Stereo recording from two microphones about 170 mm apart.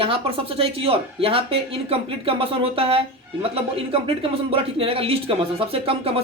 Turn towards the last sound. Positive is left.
turn(degrees=-35)  # may be behind; listen again after turning